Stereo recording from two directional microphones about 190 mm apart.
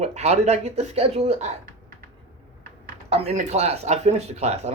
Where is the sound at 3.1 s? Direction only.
35° right (ahead or behind).